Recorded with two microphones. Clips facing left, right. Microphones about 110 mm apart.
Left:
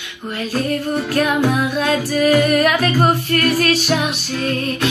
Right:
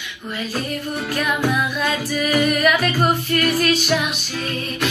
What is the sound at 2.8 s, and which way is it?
Singing, 50° left (ahead or behind).